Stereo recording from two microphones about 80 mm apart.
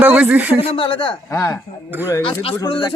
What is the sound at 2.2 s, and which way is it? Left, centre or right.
Speech, left.